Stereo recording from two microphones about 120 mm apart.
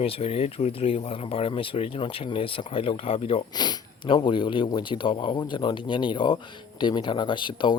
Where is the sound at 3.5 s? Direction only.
35° left (ahead or behind).